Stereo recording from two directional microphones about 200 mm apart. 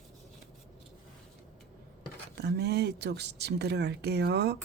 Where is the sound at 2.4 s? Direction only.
55° right (ahead or behind).